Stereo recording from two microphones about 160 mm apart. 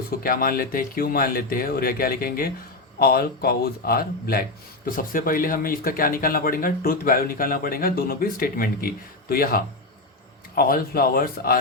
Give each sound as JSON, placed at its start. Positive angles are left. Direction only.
{"t": 0.1, "sound": "speech", "side_deg": 65}